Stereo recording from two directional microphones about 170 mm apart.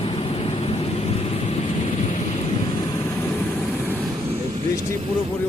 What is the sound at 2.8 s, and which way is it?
Vehicle, 15° left (ahead or behind).